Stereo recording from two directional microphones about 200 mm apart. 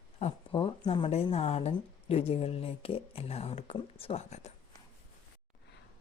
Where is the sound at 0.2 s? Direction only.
30° left (ahead or behind).